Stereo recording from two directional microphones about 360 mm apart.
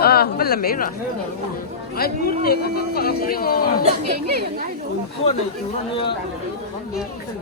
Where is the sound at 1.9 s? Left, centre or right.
Left.